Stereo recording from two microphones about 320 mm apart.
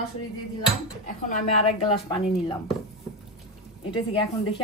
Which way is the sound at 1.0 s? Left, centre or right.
Left.